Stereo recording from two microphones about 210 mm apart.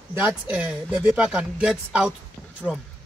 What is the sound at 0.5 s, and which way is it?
Speech, 5° right (ahead or behind).